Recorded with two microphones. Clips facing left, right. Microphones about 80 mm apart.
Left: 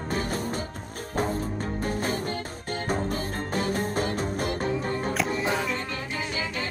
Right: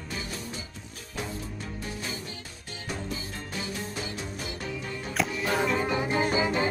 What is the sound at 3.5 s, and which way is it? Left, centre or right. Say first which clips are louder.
Music: left 8 dB; left.